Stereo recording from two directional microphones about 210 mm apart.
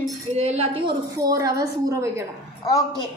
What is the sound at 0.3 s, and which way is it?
A woman's voice, 30° right (ahead or behind).